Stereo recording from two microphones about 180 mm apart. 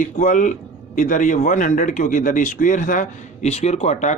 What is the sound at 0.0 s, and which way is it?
Speech, 45° left (ahead or behind).